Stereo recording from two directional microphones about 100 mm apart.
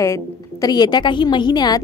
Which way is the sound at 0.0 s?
35° left (ahead or behind).